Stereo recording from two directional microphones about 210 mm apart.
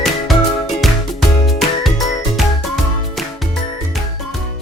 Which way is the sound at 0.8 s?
Centre (ahead or behind).